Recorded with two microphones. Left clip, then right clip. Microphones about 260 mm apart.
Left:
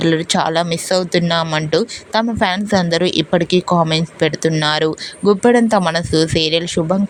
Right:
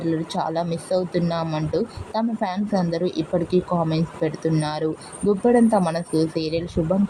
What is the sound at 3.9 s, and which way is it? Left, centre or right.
Speech, left.